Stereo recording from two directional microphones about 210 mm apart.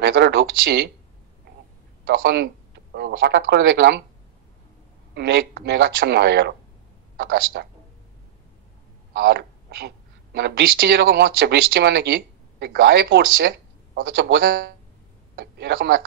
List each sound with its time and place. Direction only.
0.0 s a sound: 50° right (ahead or behind)
2.0 s speech: 50° right (ahead or behind)
5.1 s speech: 50° right (ahead or behind)
9.2 s a woman's voice: 50° right (ahead or behind)